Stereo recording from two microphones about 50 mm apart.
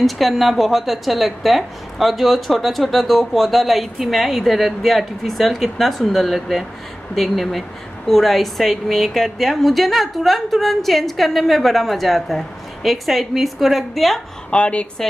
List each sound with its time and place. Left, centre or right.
0.0 s a woman's voice: centre
14.5 s speech: left